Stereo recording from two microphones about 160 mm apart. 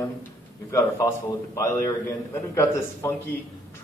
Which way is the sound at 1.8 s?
20° left (ahead or behind).